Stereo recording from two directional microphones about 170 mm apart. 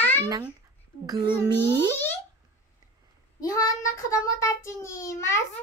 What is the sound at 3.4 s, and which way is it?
Child singing, 20° left (ahead or behind).